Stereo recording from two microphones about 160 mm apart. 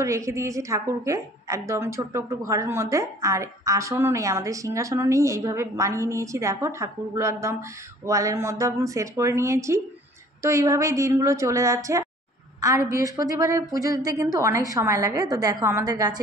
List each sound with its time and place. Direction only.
0.0 s a woman's voice: 20° right (ahead or behind)